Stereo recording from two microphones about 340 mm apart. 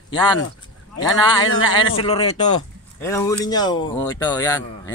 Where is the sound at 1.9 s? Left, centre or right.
Centre.